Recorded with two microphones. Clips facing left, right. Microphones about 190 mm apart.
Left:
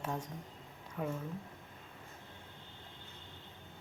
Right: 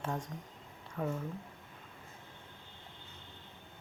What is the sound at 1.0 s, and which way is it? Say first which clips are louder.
Speech: right 2 dB; 10° left (ahead or behind).